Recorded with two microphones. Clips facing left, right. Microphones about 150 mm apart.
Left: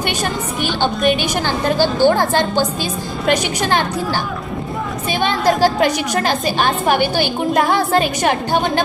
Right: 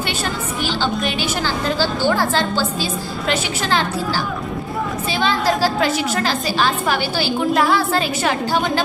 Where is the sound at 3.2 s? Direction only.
50° left (ahead or behind).